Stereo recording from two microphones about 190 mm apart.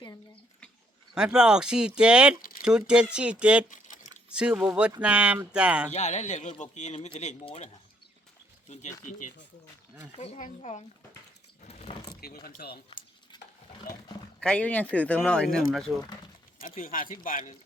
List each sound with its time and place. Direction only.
1.1 s speech: 5° right (ahead or behind)
3.7 s a sound: 40° left (ahead or behind)
4.3 s speech: 5° right (ahead or behind)
5.9 s speech: 35° left (ahead or behind)
8.7 s speech: 40° left (ahead or behind)
11.6 s a sound: 35° left (ahead or behind)
12.2 s speech: 50° left (ahead or behind)
14.4 s speech: 5° left (ahead or behind)
16.6 s speech: 45° left (ahead or behind)